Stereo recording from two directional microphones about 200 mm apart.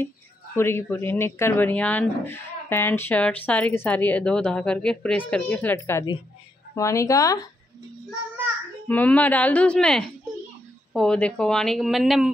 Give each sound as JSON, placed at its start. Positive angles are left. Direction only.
{"t": 0.6, "sound": "speech", "side_deg": 10}
{"t": 8.8, "sound": "speech", "side_deg": 10}